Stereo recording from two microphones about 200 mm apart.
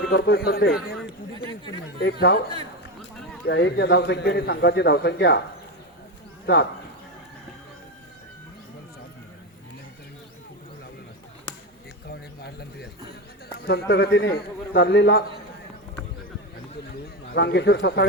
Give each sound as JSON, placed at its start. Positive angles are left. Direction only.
{"t": 0.1, "sound": "a man's voice", "side_deg": 50}
{"t": 2.0, "sound": "a man's voice", "side_deg": 55}
{"t": 3.4, "sound": "a man's voice", "side_deg": 60}
{"t": 6.4, "sound": "speech", "side_deg": 55}
{"t": 12.0, "sound": "bird", "side_deg": 50}
{"t": 13.7, "sound": "a man's voice", "side_deg": 55}
{"t": 17.3, "sound": "a man's voice", "side_deg": 55}